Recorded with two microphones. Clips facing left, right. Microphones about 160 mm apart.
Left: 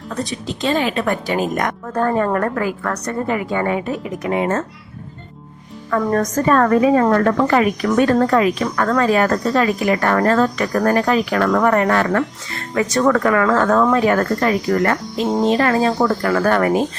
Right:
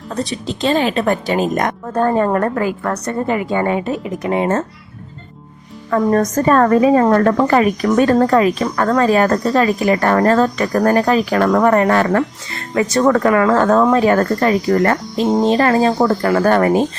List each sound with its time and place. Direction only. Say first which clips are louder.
0.3 s a woman's voice: right 3 dB; 30° right (ahead or behind)
5.9 s a woman's voice: right 3 dB; 30° right (ahead or behind)